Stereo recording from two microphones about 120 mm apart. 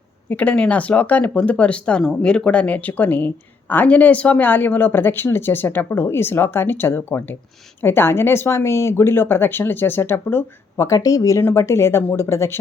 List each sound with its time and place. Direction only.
0.3 s speech: 10° left (ahead or behind)